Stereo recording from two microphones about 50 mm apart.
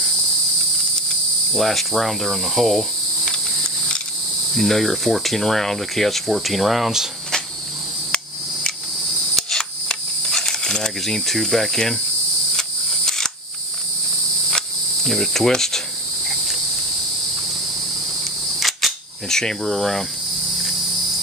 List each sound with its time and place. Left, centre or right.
1.5 s speech: centre
3.3 s a sound: centre
4.6 s speech: centre
9.3 s camera: centre
10.2 s speech: centre
12.9 s single-lens reflex camera: centre
15.0 s cricket: centre
18.6 s cricket: centre